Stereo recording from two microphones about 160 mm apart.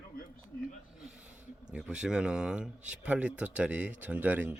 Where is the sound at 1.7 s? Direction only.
5° right (ahead or behind).